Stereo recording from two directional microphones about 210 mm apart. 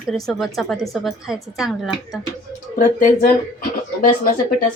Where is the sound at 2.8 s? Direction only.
40° left (ahead or behind).